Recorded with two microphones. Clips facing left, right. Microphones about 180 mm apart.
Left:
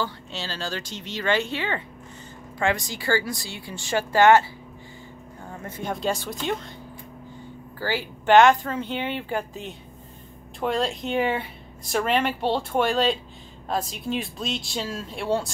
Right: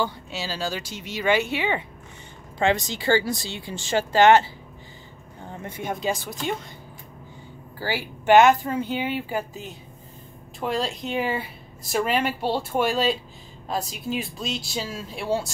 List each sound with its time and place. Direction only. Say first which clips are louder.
0.0 s speech: right 3 dB; 10° right (ahead or behind)
5.6 s speech: right 1 dB; 15° right (ahead or behind)
5.9 s speech: left 1 dB; 5° right (ahead or behind)
7.8 s speech: even; 10° right (ahead or behind)